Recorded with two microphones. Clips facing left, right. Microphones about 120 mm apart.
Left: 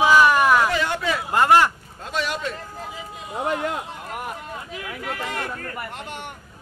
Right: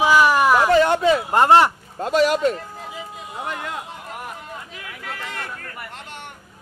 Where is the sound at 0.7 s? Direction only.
40° right (ahead or behind).